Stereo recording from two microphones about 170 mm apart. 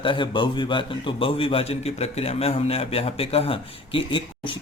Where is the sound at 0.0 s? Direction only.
30° left (ahead or behind).